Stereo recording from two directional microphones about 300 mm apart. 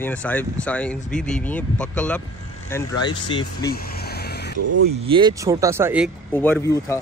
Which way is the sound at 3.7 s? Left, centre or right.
Left.